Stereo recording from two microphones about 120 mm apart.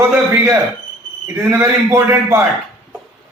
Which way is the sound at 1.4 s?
15° right (ahead or behind).